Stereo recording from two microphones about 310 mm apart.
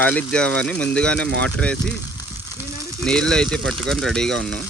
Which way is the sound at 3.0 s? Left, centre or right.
Centre.